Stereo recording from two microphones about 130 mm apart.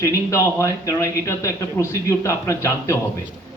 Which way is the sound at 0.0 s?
25° left (ahead or behind).